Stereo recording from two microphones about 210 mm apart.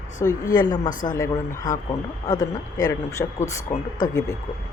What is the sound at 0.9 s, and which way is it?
Speech, 40° left (ahead or behind).